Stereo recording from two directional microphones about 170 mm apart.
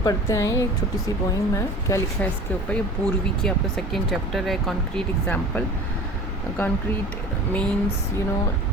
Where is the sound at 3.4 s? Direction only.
Centre (ahead or behind).